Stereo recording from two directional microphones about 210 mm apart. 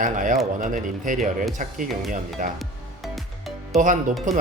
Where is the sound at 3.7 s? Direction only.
35° right (ahead or behind).